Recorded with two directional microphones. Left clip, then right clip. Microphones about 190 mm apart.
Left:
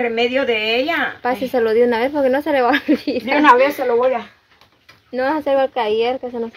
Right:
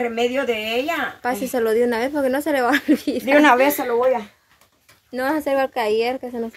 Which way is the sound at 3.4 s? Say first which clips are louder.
Left 6 dB; 75° right (ahead or behind).